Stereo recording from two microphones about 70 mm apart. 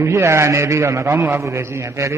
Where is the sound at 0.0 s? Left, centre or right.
Right.